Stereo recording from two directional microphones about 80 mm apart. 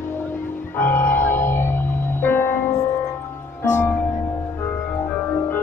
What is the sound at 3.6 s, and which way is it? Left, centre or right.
Music, left.